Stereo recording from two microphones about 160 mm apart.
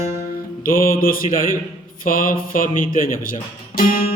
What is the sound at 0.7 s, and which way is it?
Mantra, 65° left (ahead or behind).